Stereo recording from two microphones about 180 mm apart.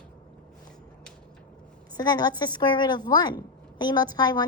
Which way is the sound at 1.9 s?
20° left (ahead or behind).